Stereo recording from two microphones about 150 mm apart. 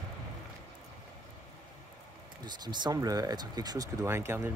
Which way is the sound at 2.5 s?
30° right (ahead or behind).